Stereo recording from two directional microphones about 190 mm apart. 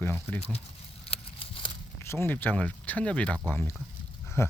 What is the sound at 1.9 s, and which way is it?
Speech, 10° left (ahead or behind).